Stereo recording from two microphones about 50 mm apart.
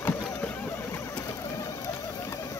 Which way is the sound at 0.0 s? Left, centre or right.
Left.